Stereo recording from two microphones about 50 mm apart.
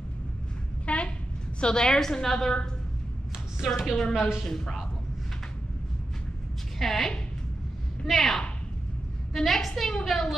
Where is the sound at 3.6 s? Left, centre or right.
Centre.